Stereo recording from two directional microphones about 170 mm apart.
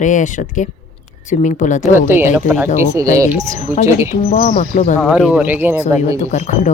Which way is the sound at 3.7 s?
15° right (ahead or behind).